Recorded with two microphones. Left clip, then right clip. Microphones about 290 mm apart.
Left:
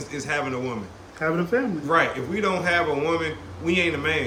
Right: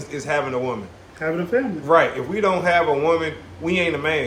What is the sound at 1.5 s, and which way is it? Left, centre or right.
Speech, centre.